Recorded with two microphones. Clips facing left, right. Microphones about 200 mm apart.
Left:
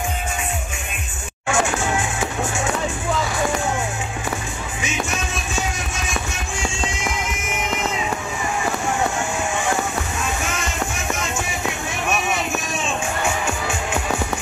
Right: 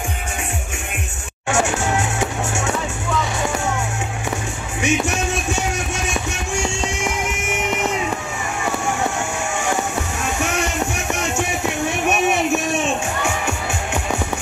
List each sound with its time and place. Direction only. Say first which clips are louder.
2.0 s music: right 2 dB; 70° right (ahead or behind)
4.8 s music: right 7 dB; 65° right (ahead or behind)